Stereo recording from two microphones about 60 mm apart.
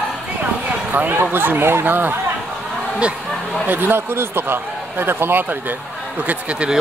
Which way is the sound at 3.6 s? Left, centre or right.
Right.